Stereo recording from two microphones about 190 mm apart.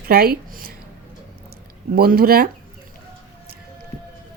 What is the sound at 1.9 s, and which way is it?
Speech, 50° right (ahead or behind).